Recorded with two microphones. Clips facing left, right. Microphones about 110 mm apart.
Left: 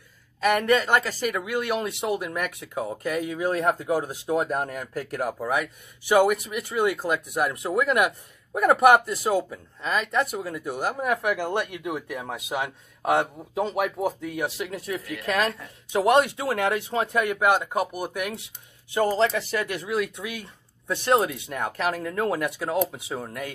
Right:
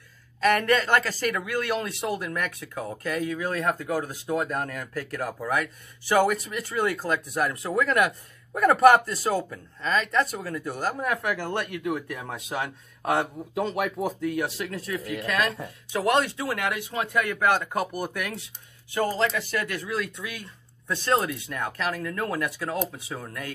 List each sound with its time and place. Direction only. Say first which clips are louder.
0.4 s speech: left 1 dB; 10° left (ahead or behind)
15.2 s speech: left 3 dB; 25° left (ahead or behind)
18.9 s speech: left 3 dB; 25° left (ahead or behind)